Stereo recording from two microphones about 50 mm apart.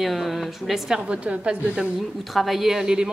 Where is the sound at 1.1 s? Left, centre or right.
Right.